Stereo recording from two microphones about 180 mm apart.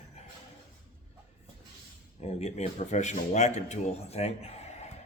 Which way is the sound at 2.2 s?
35° left (ahead or behind).